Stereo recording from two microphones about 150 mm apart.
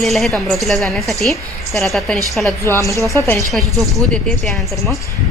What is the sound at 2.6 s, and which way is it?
Speech, 20° left (ahead or behind).